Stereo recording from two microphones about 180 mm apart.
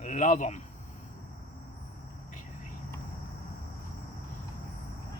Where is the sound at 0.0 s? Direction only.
45° left (ahead or behind).